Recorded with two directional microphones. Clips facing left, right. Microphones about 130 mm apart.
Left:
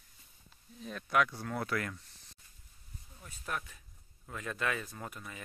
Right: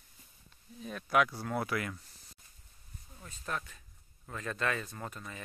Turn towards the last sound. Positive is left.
turn(degrees=10)  # may be behind; listen again after turning